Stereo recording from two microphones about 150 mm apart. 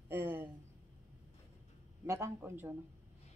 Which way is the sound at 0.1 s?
15° right (ahead or behind).